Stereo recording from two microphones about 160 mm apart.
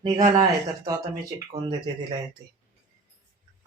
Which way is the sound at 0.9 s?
25° right (ahead or behind).